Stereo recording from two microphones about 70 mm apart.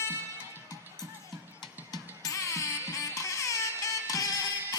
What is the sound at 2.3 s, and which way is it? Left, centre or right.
Music, left.